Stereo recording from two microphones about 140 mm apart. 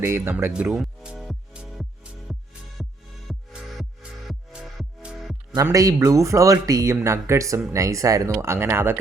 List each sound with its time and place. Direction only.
0.0 s music: 15° right (ahead or behind)
5.5 s speech: 25° right (ahead or behind)